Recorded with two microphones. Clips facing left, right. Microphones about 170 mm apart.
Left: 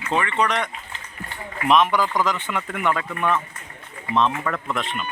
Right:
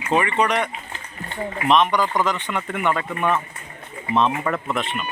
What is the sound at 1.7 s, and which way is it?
Speech, 5° left (ahead or behind).